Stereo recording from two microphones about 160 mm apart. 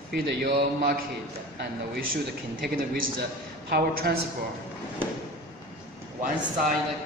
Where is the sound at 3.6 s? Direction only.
80° right.